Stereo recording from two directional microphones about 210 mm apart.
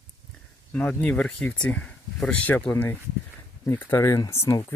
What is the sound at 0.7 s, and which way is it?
Speech, 5° left (ahead or behind).